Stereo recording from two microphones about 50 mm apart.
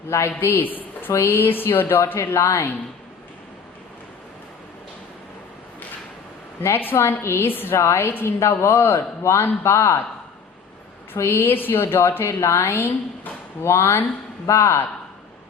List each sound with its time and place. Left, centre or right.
0.1 s a man's voice: left
0.6 s a woman's voice: left
1.1 s a woman's voice: left
2.1 s a man's voice: left
6.6 s a man's voice: left
7.4 s a woman's voice: left
11.2 s a woman's voice: left